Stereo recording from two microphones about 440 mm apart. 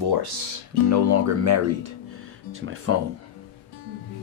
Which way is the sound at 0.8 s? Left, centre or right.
Right.